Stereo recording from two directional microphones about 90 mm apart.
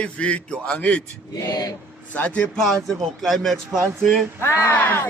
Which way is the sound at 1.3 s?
40° left (ahead or behind).